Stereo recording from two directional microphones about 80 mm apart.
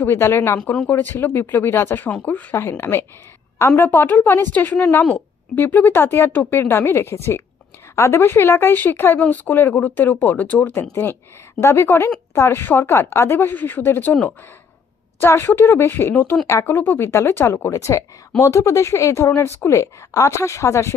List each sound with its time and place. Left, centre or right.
0.0 s speech: left
0.6 s speech: centre
0.8 s speech: left
2.0 s speech: centre
2.8 s a woman's voice: left
15.1 s speech: left
17.5 s a woman's voice: left